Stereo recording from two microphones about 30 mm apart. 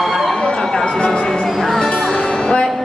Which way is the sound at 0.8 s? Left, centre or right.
Left.